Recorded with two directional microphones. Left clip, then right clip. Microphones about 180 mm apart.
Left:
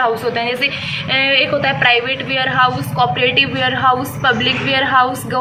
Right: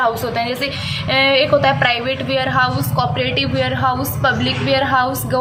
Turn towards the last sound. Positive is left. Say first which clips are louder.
# left 3 dB
turn(degrees=-35)  # may be behind; listen again after turning